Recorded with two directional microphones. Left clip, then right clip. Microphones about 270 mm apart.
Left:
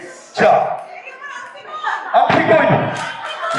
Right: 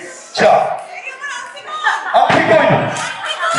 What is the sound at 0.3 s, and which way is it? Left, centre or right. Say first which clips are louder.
Speech: right 2 dB; centre.